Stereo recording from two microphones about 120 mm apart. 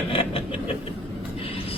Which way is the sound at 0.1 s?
50° left (ahead or behind).